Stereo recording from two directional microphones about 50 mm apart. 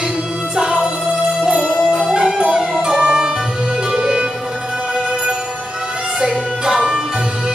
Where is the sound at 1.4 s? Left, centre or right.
Centre.